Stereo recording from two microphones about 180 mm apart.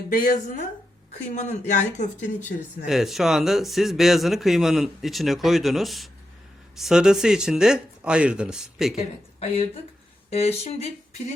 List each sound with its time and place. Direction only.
0.1 s speech: 50° left (ahead or behind)
2.8 s speech: centre (ahead or behind)
9.4 s speech: 35° left (ahead or behind)